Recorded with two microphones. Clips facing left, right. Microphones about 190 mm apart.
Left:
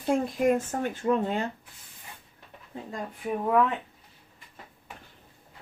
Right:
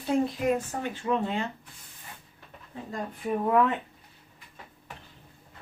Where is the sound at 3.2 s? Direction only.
Centre (ahead or behind).